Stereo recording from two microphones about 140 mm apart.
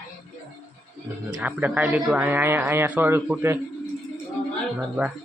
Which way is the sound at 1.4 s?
10° right (ahead or behind).